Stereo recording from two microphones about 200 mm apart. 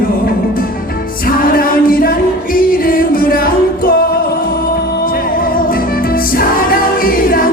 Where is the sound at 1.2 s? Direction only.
45° left (ahead or behind).